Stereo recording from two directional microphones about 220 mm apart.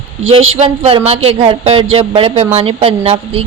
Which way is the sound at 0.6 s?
25° right (ahead or behind).